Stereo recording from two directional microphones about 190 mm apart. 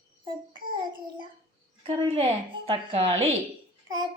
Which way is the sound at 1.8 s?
30° right (ahead or behind).